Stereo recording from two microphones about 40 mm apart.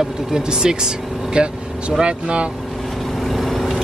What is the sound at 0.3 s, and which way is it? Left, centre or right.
Speech, centre.